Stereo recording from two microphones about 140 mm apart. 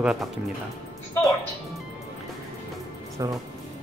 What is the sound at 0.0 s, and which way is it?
Speech, centre (ahead or behind).